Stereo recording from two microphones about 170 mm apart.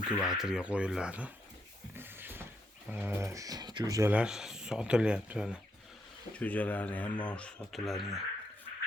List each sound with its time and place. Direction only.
0.1 s speech: centre (ahead or behind)
2.0 s a sound: 10° right (ahead or behind)
2.9 s speech: 10° right (ahead or behind)
4.1 s speech: 5° right (ahead or behind)
6.4 s speech: 10° left (ahead or behind)